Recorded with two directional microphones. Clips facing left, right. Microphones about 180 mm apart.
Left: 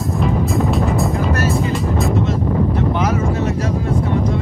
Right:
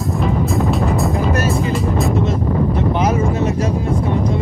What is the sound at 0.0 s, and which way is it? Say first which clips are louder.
Music: even; centre (ahead or behind).